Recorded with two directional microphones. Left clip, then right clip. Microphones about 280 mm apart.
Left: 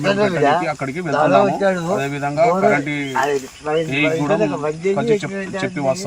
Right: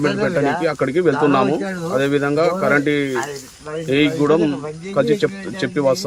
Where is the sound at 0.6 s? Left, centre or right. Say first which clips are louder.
Right 6 dB; centre.